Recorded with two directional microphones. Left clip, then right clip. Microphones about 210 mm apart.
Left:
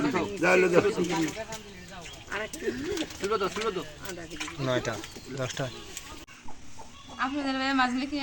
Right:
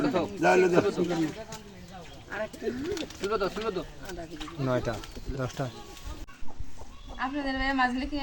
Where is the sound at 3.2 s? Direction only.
30° right (ahead or behind).